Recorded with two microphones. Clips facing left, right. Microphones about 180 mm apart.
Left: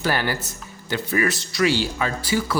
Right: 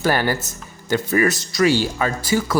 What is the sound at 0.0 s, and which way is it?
Speech, 45° right (ahead or behind).